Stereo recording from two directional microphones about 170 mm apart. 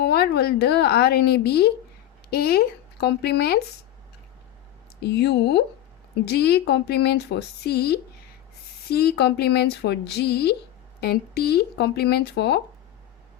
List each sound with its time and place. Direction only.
0.0 s speech: 70° left (ahead or behind)
5.0 s speech: 80° left